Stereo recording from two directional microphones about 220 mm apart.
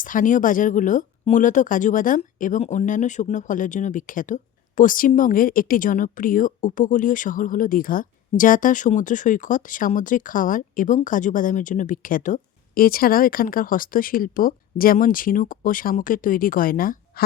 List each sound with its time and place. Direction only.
0.0 s speech: 35° left (ahead or behind)